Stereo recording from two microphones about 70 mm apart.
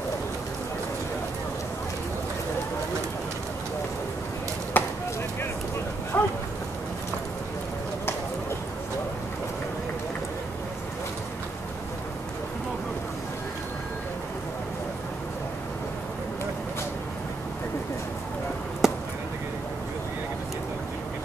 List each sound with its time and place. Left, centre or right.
4.7 s chop: left
6.1 s a sound: left
18.8 s chop: centre